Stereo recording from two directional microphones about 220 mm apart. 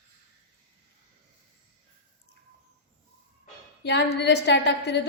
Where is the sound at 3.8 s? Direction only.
50° left (ahead or behind).